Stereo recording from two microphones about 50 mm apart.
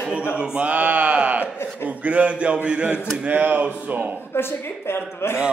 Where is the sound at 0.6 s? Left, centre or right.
Right.